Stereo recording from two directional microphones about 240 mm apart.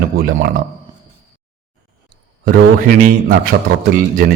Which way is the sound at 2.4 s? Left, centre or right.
Right.